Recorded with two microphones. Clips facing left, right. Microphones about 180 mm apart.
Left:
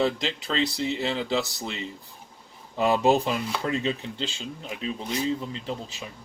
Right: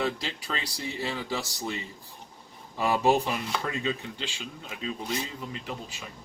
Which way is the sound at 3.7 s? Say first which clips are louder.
Left 4 dB; 30° left (ahead or behind).